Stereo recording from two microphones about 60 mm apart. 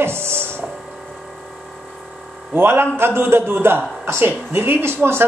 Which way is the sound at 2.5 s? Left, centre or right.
Right.